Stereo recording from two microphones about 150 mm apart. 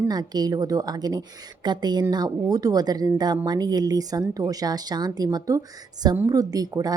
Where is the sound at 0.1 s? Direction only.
25° right (ahead or behind).